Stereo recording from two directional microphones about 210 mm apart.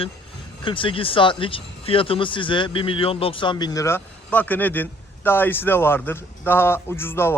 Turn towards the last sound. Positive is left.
turn(degrees=10)  # may be behind; listen again after turning